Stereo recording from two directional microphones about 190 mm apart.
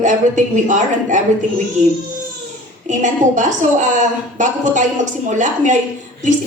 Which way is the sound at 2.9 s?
40° right (ahead or behind).